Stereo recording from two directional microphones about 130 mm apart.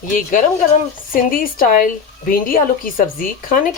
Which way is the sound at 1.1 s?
90° left.